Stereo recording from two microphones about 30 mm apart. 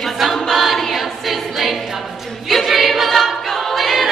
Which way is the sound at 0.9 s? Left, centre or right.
Centre.